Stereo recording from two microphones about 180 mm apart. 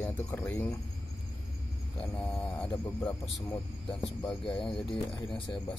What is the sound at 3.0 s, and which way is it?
Speech, 25° left (ahead or behind).